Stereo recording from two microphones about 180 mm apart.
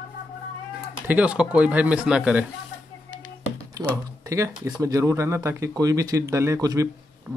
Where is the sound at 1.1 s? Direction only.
5° right (ahead or behind).